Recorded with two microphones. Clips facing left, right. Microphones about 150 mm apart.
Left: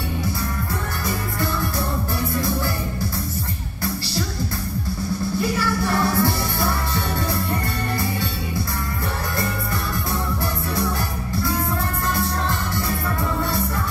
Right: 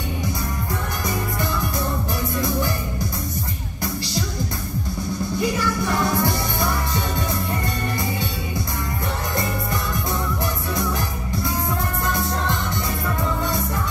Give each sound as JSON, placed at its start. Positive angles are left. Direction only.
{"t": 5.4, "sound": "music", "side_deg": -20}